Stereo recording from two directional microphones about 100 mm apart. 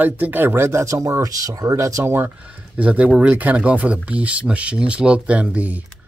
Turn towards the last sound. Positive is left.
turn(degrees=-15)  # may be behind; listen again after turning